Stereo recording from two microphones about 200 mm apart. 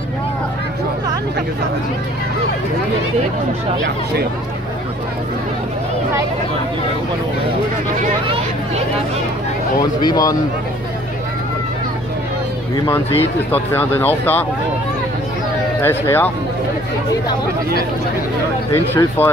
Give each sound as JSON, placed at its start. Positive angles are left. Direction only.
{"t": 10.0, "sound": "speech", "side_deg": 20}
{"t": 12.7, "sound": "speech", "side_deg": 20}
{"t": 13.5, "sound": "speech", "side_deg": 10}
{"t": 15.8, "sound": "speech", "side_deg": 10}
{"t": 18.7, "sound": "speech", "side_deg": 15}